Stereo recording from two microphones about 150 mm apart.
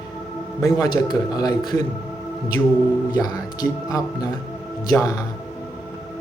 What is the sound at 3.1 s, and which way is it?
A man's voice, 25° left (ahead or behind).